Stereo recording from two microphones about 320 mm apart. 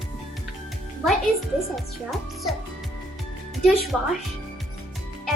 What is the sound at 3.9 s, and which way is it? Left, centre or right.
Speech, centre.